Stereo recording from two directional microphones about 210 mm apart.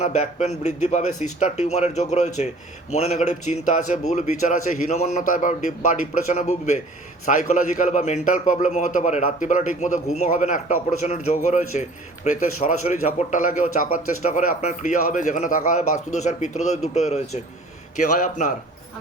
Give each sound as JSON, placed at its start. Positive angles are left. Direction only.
{"t": 0.0, "sound": "a man's voice", "side_deg": 30}